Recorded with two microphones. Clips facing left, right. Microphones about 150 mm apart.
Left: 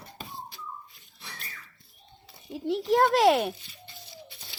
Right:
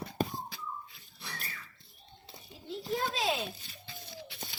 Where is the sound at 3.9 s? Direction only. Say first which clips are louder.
Right 3 dB; 90° right.